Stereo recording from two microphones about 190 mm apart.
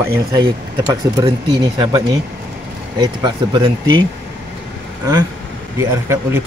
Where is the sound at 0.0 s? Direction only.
15° right (ahead or behind).